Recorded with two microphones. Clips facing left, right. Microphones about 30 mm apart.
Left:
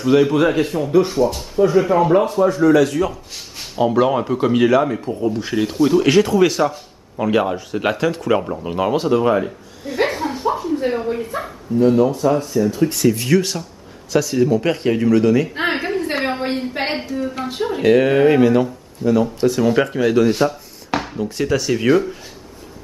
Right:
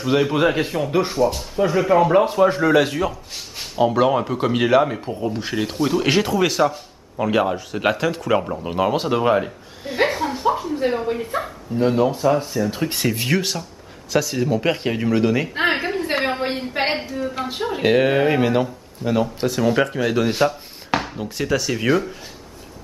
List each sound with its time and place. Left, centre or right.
0.0 s a woman's voice: centre
1.1 s a man's voice: centre
2.2 s speech: right
2.7 s speech: right
3.0 s a woman's voice: centre
6.3 s a man's voice: centre
10.0 s chuckle: centre
11.7 s speech: right
12.8 s speech: right
13.1 s a woman's voice: centre
19.2 s a man's voice: centre
20.2 s a sound: centre
21.4 s a man's voice: centre